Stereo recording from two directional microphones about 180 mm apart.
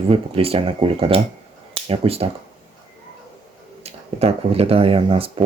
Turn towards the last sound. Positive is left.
turn(degrees=-30)  # may be behind; listen again after turning